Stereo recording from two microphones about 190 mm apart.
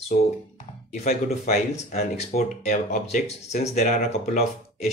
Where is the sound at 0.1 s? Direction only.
45° left (ahead or behind).